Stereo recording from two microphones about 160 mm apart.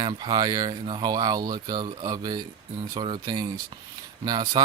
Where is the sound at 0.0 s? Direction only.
30° right (ahead or behind).